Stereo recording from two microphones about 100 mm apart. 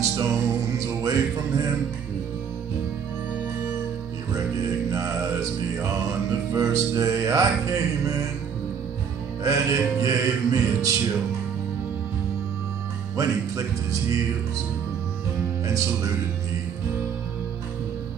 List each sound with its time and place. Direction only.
0.0 s music: 30° right (ahead or behind)
4.9 s music: 30° right (ahead or behind)
9.4 s music: 35° right (ahead or behind)
13.1 s speech: 30° right (ahead or behind)
15.6 s music: 35° right (ahead or behind)